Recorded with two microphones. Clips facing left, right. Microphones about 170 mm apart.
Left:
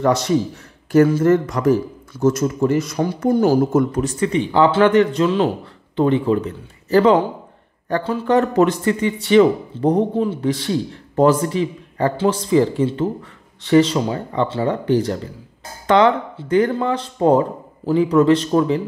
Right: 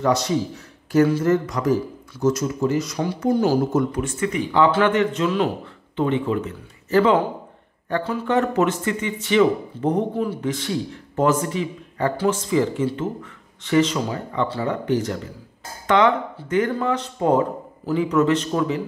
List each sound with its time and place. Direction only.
0.9 s a man's voice: 55° left (ahead or behind); by 18.8 s 35° left (ahead or behind)